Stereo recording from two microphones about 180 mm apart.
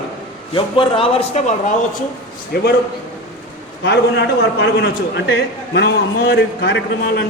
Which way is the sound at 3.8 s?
70° left (ahead or behind).